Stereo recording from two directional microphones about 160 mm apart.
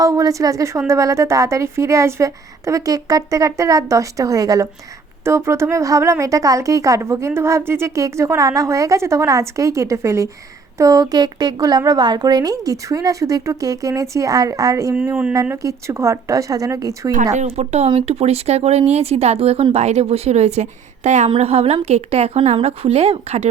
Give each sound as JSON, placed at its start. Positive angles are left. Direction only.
{"t": 0.0, "sound": "a woman's voice", "side_deg": -20}
{"t": 17.3, "sound": "a woman's voice", "side_deg": -45}